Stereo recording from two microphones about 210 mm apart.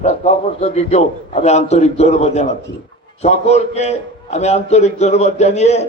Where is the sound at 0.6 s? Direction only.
30° left (ahead or behind).